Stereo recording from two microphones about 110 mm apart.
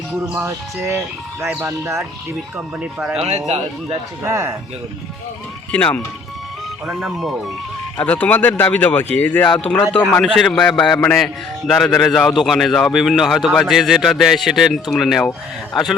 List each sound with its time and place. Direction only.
0.4 s speech: 25° right (ahead or behind)
2.6 s speech: 10° right (ahead or behind)
3.2 s speech: 75° right (ahead or behind)
4.2 s speech: 25° right (ahead or behind)
5.7 s speech: 10° left (ahead or behind)
6.8 s speech: centre (ahead or behind)
7.9 s speech: 15° left (ahead or behind)